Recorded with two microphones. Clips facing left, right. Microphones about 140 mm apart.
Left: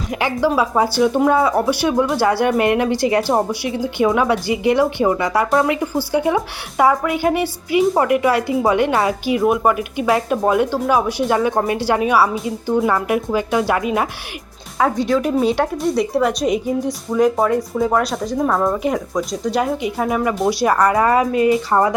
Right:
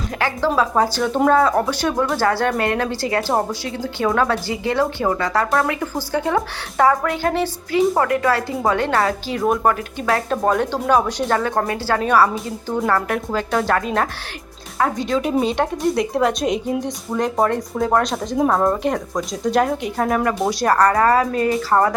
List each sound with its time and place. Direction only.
0.2 s speech: 15° left (ahead or behind)